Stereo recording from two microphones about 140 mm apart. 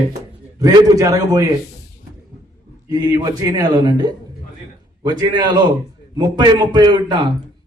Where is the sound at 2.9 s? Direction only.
30° right (ahead or behind).